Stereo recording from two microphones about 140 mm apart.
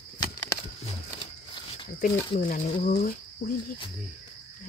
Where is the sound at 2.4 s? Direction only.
65° left (ahead or behind).